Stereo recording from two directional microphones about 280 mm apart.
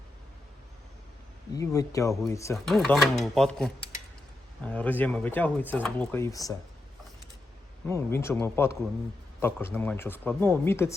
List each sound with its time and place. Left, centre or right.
1.5 s speech: centre
7.9 s speech: centre